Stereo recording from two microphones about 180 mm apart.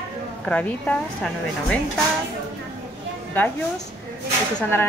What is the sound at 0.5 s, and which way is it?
Speech, 5° left (ahead or behind).